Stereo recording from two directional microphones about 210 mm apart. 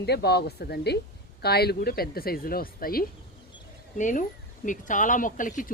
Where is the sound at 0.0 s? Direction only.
50° left (ahead or behind).